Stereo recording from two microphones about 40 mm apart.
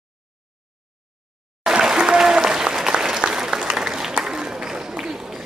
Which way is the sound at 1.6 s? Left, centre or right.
Centre.